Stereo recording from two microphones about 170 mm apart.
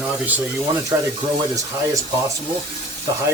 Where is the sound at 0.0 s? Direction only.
10° right (ahead or behind).